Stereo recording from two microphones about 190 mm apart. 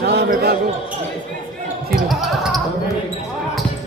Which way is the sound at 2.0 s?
Centre (ahead or behind).